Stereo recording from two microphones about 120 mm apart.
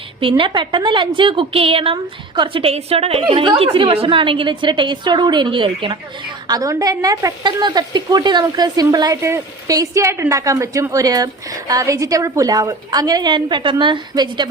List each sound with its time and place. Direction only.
0.2 s a woman's voice: 45° right (ahead or behind)
6.6 s a woman's voice: 30° right (ahead or behind)